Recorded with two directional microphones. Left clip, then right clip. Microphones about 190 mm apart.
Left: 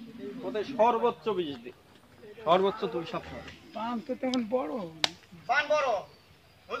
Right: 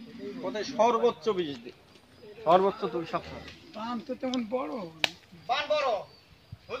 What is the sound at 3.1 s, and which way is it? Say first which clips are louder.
Speech: right 4 dB; 15° right (ahead or behind).